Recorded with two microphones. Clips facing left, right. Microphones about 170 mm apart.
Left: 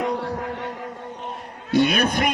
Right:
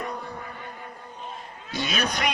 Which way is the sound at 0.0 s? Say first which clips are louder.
Left 9 dB; 90° left.